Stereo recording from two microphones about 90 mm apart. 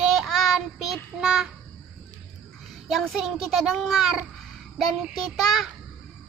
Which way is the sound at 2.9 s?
Centre (ahead or behind).